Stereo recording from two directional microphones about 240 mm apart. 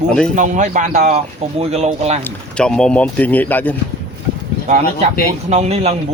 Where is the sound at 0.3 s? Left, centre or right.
Right.